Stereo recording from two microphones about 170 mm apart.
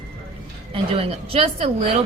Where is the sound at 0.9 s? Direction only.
35° right (ahead or behind).